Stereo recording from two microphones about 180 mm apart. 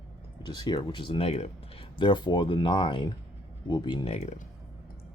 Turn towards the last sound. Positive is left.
turn(degrees=40)  # may be behind; listen again after turning